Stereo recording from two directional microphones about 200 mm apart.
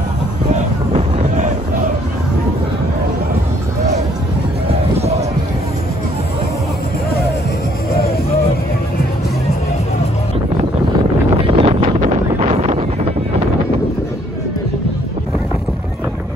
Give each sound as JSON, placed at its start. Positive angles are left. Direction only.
{"t": 0.9, "sound": "boat", "side_deg": -40}
{"t": 4.9, "sound": "a sound", "side_deg": -30}
{"t": 11.4, "sound": "wind noise", "side_deg": -25}